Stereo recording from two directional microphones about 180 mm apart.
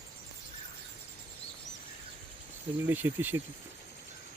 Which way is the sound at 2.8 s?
10° right (ahead or behind).